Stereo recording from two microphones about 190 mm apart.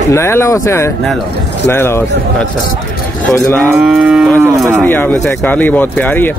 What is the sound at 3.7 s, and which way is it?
Moo, 5° right (ahead or behind).